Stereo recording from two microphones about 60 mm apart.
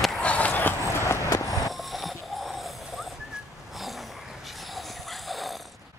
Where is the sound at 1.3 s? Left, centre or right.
Left.